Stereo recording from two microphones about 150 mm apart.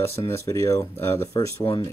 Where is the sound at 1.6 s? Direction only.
35° left (ahead or behind).